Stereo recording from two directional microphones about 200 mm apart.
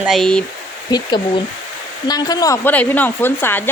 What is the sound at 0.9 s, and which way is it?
Speech, 20° left (ahead or behind).